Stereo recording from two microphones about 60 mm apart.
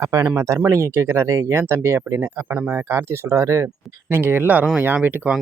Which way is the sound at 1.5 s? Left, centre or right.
Right.